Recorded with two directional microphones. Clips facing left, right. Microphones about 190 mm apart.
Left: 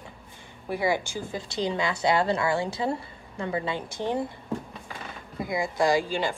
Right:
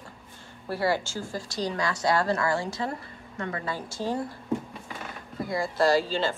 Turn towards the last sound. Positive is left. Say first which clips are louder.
# right 1 dB
turn(degrees=15)  # may be behind; listen again after turning